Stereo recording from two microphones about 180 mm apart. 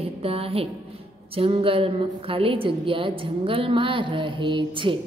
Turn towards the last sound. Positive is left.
turn(degrees=-25)  # may be behind; listen again after turning